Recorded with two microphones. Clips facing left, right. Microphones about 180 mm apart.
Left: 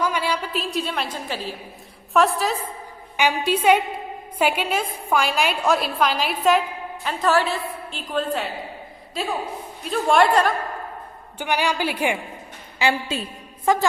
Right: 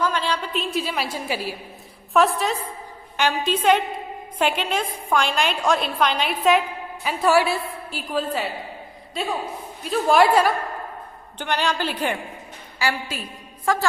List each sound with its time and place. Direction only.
0.0 s a woman's voice: 10° left (ahead or behind); by 1.5 s 10° right (ahead or behind)
2.1 s a woman's voice: centre (ahead or behind)
3.2 s a woman's voice: 10° left (ahead or behind); by 10.5 s 5° right (ahead or behind)
11.3 s a woman's voice: 10° left (ahead or behind)
12.8 s a woman's voice: 25° left (ahead or behind)